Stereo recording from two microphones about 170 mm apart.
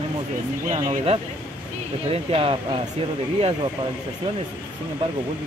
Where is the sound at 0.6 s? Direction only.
40° right (ahead or behind).